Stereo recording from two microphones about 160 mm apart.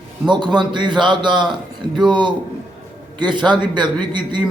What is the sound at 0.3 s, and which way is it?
A man's voice, 30° right (ahead or behind).